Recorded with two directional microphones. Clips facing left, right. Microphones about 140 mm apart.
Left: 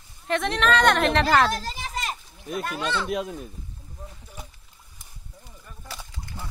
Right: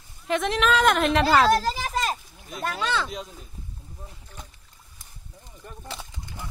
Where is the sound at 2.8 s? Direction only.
90° right.